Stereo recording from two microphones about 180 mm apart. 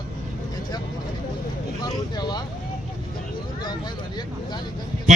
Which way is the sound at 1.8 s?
25° left (ahead or behind).